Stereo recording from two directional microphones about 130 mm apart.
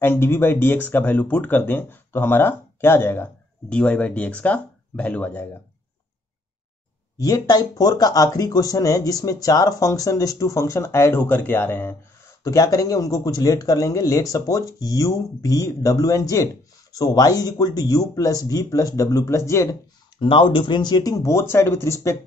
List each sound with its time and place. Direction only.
0.0 s speech: 15° left (ahead or behind)
7.2 s speech: 25° left (ahead or behind)
20.2 s speech: 40° left (ahead or behind); by 21.9 s 20° left (ahead or behind)